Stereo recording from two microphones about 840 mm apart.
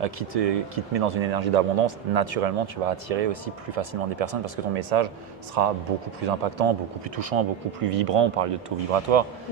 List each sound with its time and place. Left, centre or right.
0.0 s speech: right